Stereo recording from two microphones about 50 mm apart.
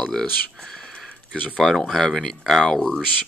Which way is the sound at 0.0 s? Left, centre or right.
Centre.